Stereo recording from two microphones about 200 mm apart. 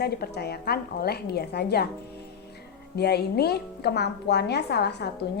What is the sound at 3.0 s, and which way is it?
A woman's voice, 55° left (ahead or behind).